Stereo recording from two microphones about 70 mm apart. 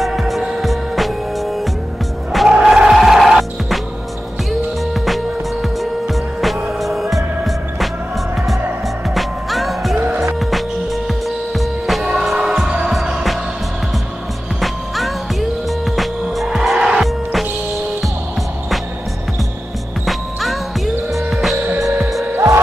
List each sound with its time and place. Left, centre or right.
0.0 s music: centre
5.0 s music: centre
9.1 s music: centre
11.1 s music: centre
14.6 s music: centre
17.0 s music: centre
20.1 s music: centre